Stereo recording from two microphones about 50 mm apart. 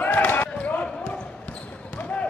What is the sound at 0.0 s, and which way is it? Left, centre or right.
Basketball bounce, left.